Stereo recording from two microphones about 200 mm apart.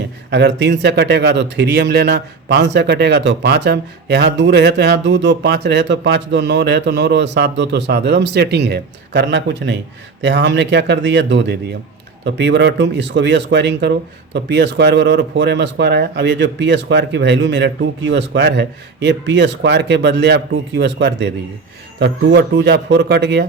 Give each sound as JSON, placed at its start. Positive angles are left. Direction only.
{"t": 0.3, "sound": "speech", "side_deg": -60}